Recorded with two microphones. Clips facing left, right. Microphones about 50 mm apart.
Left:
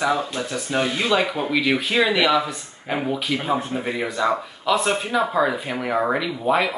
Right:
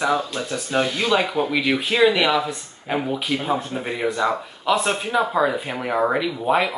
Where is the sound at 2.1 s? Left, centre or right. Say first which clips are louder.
Left 1 dB; centre.